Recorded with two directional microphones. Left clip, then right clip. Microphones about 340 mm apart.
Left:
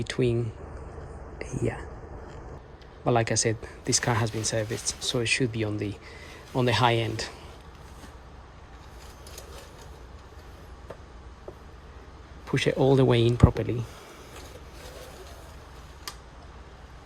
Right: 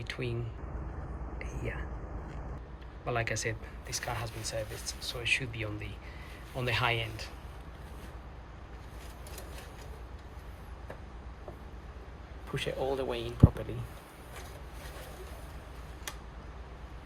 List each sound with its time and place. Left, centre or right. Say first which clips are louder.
0.0 s speech: left 11 dB; centre
1.4 s speech: left 10 dB; centre
3.1 s speech: left 8 dB; centre
12.5 s speech: left 11 dB; left